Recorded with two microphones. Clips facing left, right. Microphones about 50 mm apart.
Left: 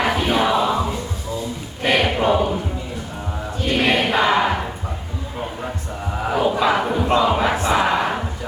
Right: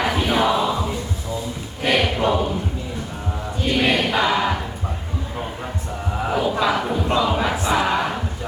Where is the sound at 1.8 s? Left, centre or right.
Centre.